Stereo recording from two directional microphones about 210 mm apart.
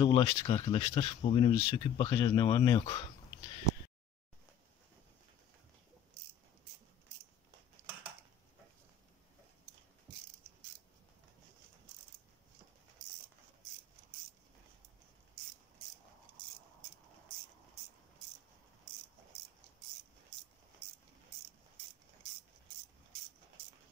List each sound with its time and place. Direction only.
0.0 s speech: 20° left (ahead or behind)